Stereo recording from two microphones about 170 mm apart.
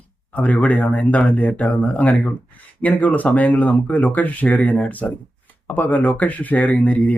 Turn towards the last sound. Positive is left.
turn(degrees=10)  # may be behind; listen again after turning